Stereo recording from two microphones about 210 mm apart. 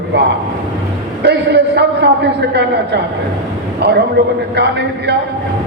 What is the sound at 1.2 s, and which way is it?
Speech, 55° right (ahead or behind).